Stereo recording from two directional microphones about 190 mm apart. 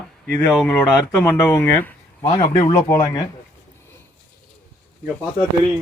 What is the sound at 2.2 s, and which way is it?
Speech, 30° left (ahead or behind).